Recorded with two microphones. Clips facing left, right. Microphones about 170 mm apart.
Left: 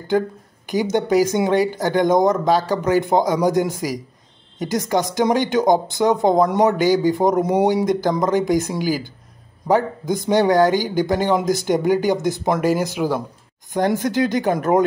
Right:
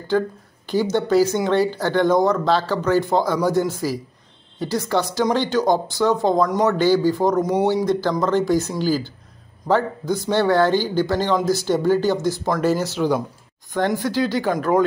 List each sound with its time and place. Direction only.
0.7 s speech: 15° left (ahead or behind)